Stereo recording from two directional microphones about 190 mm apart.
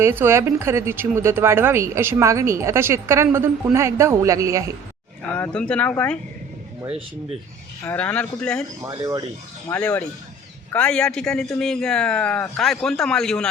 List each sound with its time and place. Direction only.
0.0 s speech: 10° right (ahead or behind)
5.3 s speech: 5° left (ahead or behind)
6.8 s speech: 30° right (ahead or behind)
7.9 s speech: 5° left (ahead or behind)
8.8 s speech: 15° right (ahead or behind)
9.6 s a man's voice: 10° left (ahead or behind)